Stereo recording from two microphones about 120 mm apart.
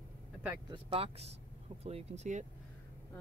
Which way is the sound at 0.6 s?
45° right (ahead or behind).